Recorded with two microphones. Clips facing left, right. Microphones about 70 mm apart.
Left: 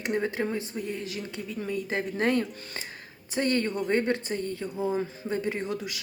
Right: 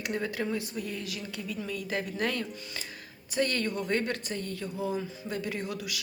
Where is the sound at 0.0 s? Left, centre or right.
Left.